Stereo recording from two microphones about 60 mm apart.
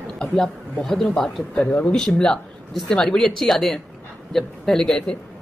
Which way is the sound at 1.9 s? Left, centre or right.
Centre.